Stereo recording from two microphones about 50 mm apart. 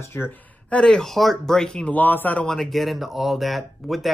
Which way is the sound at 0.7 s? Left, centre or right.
Centre.